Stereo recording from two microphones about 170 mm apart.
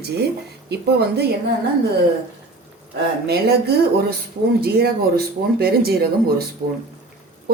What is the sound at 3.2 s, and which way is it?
A woman's voice, 70° right (ahead or behind).